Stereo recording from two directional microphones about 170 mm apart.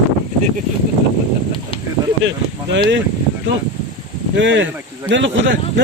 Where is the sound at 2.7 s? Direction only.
90° right.